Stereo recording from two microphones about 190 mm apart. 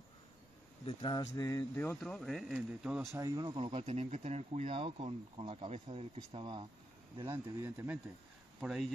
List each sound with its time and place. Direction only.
0.8 s speech: 25° left (ahead or behind); by 3.2 s 5° right (ahead or behind)
3.2 s speech: 20° right (ahead or behind)
8.5 s speech: centre (ahead or behind)